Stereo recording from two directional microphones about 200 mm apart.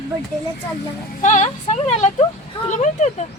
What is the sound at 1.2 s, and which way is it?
Speech, 35° left (ahead or behind).